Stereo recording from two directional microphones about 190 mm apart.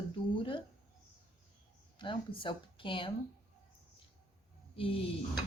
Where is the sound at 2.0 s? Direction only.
25° left (ahead or behind).